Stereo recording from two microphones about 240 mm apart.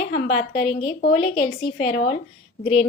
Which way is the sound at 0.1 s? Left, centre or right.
Left.